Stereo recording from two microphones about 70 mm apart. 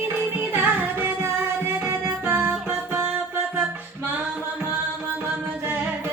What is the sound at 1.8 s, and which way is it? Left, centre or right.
Music, right.